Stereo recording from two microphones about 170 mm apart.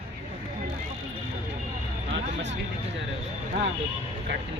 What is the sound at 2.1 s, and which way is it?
Vehicle, 90° right.